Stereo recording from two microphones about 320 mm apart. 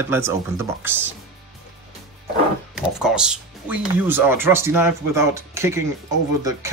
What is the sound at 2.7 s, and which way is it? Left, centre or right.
Speech, centre.